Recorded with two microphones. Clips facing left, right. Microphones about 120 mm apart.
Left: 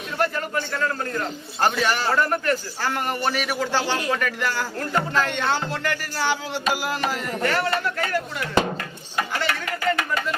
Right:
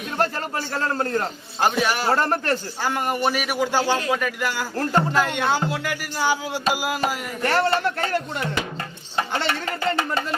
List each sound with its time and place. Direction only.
0.2 s a man's voice: 35° right (ahead or behind)
1.6 s speech: 10° right (ahead or behind)
2.1 s a man's voice: 35° right (ahead or behind)
2.8 s speech: 15° right (ahead or behind)
4.8 s a man's voice: 35° right (ahead or behind)
5.1 s speech: 10° right (ahead or behind)
7.4 s speech: 30° right (ahead or behind)